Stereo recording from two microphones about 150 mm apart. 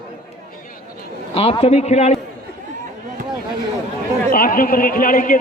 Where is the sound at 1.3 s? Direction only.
40° left (ahead or behind).